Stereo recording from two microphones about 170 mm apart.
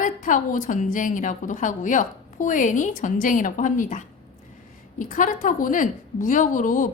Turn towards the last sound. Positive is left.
turn(degrees=50)  # may be behind; listen again after turning